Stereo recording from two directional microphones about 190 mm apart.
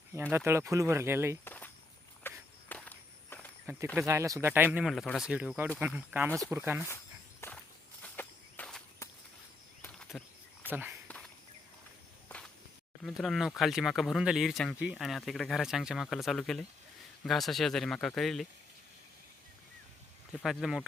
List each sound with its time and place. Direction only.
0.1 s speech: 10° right (ahead or behind)
1.5 s walk: 10° left (ahead or behind)
3.9 s speech: 15° right (ahead or behind)
7.4 s walk: 15° left (ahead or behind)
9.8 s a sound: 5° left (ahead or behind)
10.7 s speech: 10° right (ahead or behind)
13.0 s speech: centre (ahead or behind)
20.4 s speech: centre (ahead or behind)